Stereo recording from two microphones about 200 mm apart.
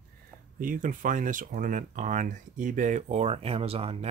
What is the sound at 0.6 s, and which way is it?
Speech, 40° right (ahead or behind).